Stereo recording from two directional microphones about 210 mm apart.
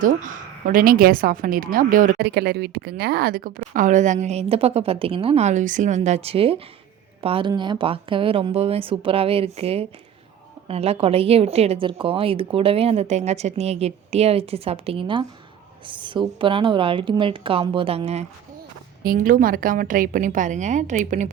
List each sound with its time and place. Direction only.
0.0 s a woman's voice: 40° right (ahead or behind)
19.0 s a woman's voice: 40° right (ahead or behind)